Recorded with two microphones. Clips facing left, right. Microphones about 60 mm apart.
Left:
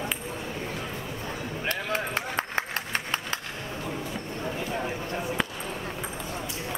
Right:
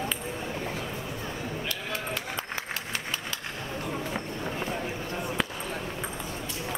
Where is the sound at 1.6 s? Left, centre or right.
Left.